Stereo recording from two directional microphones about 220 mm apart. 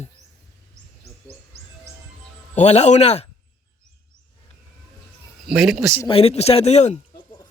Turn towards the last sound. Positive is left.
turn(degrees=30)  # may be behind; listen again after turning